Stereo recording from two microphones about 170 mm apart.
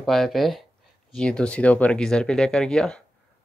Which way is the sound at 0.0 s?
Centre (ahead or behind).